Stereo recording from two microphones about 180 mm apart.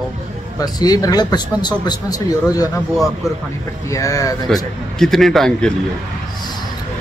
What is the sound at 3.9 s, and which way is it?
Speech, 20° left (ahead or behind).